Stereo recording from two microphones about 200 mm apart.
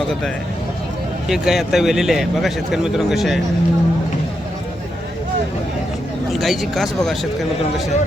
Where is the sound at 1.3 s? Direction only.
Centre (ahead or behind).